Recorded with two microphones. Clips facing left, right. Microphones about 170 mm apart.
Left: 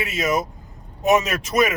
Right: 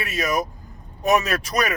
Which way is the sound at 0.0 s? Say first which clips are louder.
Left 2 dB; 20° left (ahead or behind).